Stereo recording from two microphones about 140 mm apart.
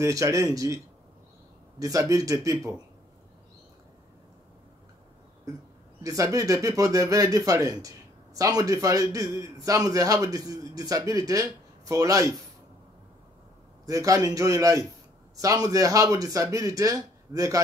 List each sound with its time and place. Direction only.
0.0 s a man's voice: 25° right (ahead or behind)
1.8 s a man's voice: 25° right (ahead or behind)
6.0 s a man's voice: 25° right (ahead or behind)
13.8 s a man's voice: 25° right (ahead or behind)